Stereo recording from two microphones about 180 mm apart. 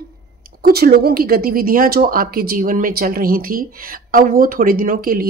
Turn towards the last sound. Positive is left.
turn(degrees=-50)  # may be behind; listen again after turning